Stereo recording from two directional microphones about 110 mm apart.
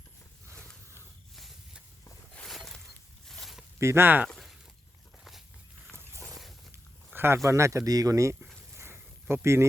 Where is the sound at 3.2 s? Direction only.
Centre (ahead or behind).